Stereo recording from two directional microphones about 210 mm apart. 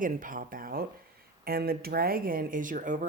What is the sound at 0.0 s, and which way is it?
Speech, 40° right (ahead or behind).